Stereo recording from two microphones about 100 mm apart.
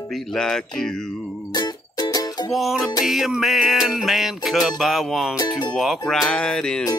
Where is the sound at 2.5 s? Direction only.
Centre (ahead or behind).